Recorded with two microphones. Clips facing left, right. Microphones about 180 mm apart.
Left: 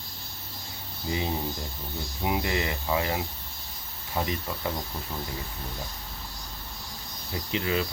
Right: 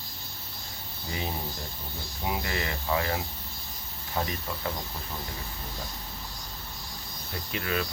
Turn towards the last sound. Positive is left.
turn(degrees=20)  # may be behind; listen again after turning